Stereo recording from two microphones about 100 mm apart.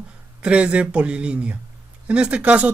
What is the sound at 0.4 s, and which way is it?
Speech, 10° right (ahead or behind).